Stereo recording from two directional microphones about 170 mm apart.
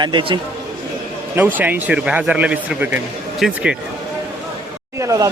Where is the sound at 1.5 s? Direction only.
10° right (ahead or behind).